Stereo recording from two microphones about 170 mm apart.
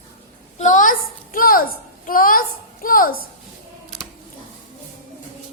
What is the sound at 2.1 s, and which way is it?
A child's voice, 55° left (ahead or behind).